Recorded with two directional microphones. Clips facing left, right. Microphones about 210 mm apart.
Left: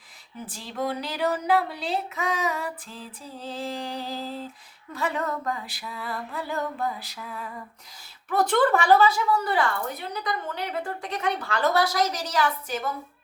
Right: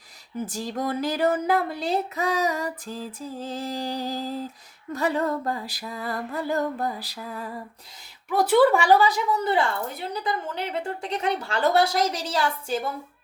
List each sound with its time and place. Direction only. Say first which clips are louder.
0.4 s speech: right 1 dB; 45° right (ahead or behind)
8.3 s a woman's voice: right 3 dB; 10° right (ahead or behind); by 12.9 s 30° right (ahead or behind)